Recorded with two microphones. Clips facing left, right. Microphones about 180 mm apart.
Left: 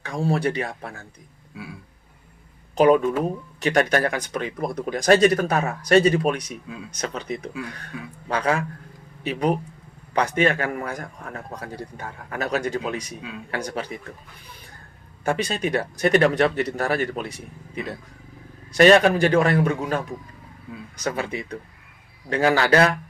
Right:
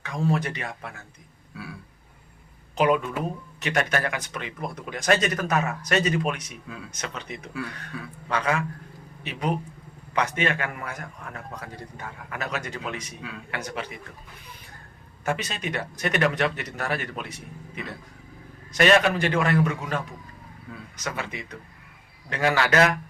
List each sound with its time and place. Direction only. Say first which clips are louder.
0.0 s speech: left 3 dB; 30° left (ahead or behind)
1.5 s a sound: left 1 dB; 20° left (ahead or behind)
2.7 s speech: left 6 dB; 35° left (ahead or behind)
7.9 s a man's voice: left 1 dB; 15° left (ahead or behind)
8.3 s speech: left 3 dB; 35° left (ahead or behind)
15.2 s speech: left 5 dB; 35° left (ahead or behind)
18.7 s speech: left 5 dB; 35° left (ahead or behind)
21.0 s speech: left 6 dB; 35° left (ahead or behind)